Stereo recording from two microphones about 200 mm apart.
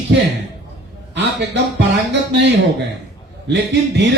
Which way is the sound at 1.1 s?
60° right (ahead or behind).